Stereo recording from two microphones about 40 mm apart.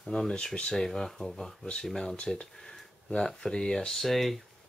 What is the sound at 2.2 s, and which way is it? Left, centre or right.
Speech, left.